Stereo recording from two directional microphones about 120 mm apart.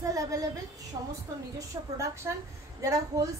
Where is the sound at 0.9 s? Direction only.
45° right (ahead or behind).